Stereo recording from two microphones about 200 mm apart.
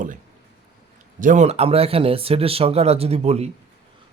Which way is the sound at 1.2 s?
40° right (ahead or behind).